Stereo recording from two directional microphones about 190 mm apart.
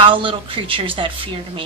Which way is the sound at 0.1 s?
25° right (ahead or behind).